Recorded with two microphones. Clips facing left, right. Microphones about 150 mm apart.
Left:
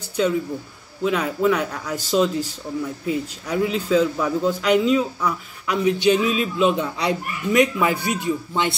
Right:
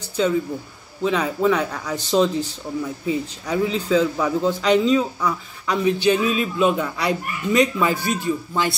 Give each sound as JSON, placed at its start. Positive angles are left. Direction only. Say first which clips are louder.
{"t": 1.0, "sound": "speech", "louder": "even", "side_deg": 5}
{"t": 5.9, "sound": "a man's voice", "louder": "even", "side_deg": 20}